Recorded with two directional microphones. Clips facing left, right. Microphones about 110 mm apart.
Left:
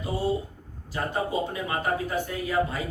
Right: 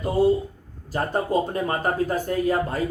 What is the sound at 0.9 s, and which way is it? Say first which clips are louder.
Speech: right 4 dB; 45° right (ahead or behind).